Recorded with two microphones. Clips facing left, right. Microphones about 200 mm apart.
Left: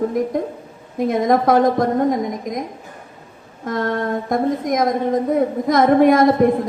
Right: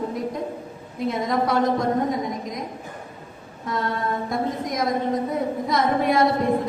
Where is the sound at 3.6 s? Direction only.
50° left (ahead or behind).